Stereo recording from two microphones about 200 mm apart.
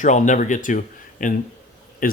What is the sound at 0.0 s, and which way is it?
A man's voice, 40° left (ahead or behind).